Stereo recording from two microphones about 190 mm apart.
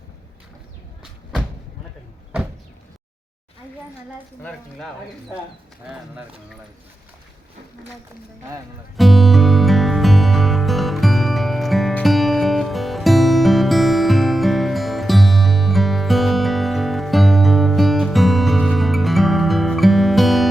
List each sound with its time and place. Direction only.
9.0 s music: centre (ahead or behind)